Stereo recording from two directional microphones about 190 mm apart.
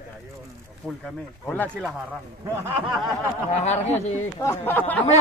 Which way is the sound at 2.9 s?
Centre (ahead or behind).